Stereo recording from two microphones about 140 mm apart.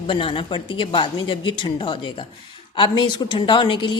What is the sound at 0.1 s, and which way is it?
A woman's voice, 35° left (ahead or behind).